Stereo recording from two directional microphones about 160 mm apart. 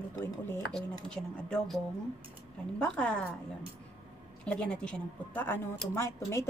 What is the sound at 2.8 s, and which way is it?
Speech, 5° left (ahead or behind).